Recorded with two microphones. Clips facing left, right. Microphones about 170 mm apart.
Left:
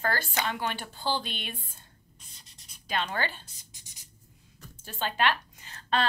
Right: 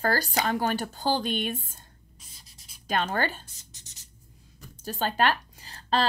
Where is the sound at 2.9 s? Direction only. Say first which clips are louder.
Right 4 dB; 45° right (ahead or behind).